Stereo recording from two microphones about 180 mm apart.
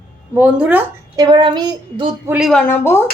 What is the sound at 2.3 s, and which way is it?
Speech, centre (ahead or behind).